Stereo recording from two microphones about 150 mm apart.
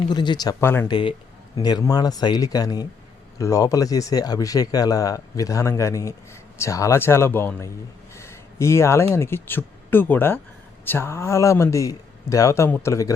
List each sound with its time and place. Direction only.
0.0 s speech: 30° left (ahead or behind)
0.6 s speech: 15° left (ahead or behind)
0.9 s speech: 30° left (ahead or behind); by 7.7 s 15° left (ahead or behind)
8.1 s a sound: 20° left (ahead or behind)
9.1 s speech: 15° left (ahead or behind)